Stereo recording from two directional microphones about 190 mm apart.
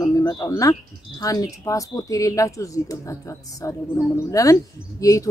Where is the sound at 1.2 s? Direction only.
20° left (ahead or behind).